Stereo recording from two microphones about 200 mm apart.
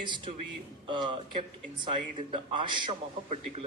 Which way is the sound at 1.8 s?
25° right (ahead or behind).